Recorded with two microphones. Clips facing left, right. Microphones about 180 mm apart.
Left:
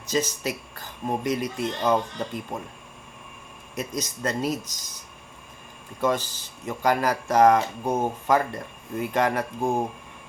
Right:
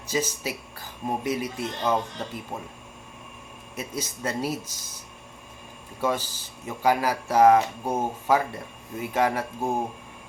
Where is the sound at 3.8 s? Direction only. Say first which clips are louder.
Left 3 dB; 10° right (ahead or behind).